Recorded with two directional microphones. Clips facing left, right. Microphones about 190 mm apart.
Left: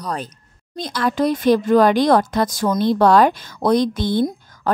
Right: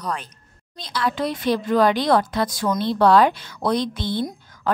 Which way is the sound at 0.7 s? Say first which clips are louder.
Left 4 dB; 45° left (ahead or behind).